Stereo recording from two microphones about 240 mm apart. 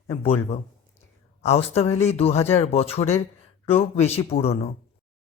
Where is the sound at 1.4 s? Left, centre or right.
Left.